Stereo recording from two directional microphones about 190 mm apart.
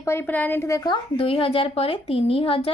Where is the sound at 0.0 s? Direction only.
10° left (ahead or behind).